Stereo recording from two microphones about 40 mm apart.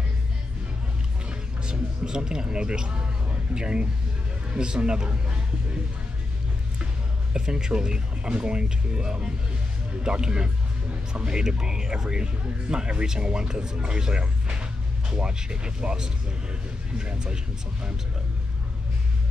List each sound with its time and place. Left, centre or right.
1.7 s a man's voice: centre
7.3 s speech: centre